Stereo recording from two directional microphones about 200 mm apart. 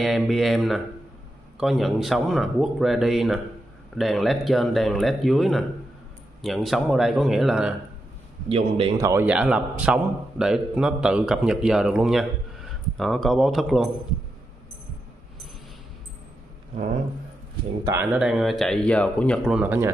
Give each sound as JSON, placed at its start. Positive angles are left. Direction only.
{"t": 0.0, "sound": "a man's voice", "side_deg": 0}
{"t": 8.5, "sound": "a man's voice", "side_deg": -30}
{"t": 8.9, "sound": "a man's voice", "side_deg": -15}
{"t": 17.8, "sound": "a man's voice", "side_deg": -10}